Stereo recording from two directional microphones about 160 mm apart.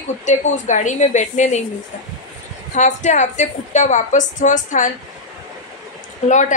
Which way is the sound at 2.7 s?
50° left (ahead or behind).